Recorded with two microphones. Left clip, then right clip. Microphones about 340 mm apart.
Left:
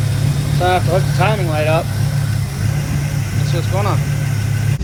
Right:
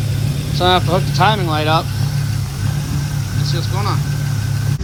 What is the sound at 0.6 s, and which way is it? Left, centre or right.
Speech, centre.